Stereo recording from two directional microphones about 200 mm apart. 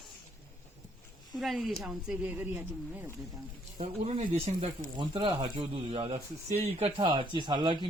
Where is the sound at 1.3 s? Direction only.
Centre (ahead or behind).